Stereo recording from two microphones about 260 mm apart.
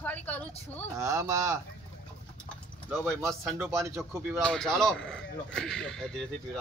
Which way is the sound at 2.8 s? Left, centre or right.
Centre.